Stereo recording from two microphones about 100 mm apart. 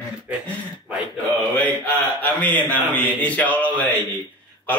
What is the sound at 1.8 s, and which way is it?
A man's voice, 15° left (ahead or behind).